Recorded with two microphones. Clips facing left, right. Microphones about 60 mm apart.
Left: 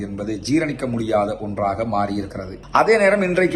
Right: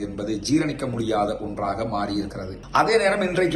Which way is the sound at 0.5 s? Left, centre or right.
Left.